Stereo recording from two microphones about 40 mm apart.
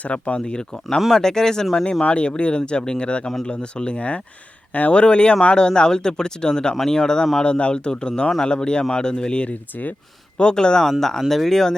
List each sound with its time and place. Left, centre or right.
0.0 s speech: left
4.9 s speech: left
9.7 s speech: left
10.3 s speech: left
11.3 s speech: centre